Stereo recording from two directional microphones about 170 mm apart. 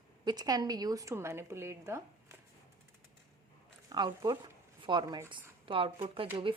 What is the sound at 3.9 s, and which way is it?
A woman's voice, 25° right (ahead or behind).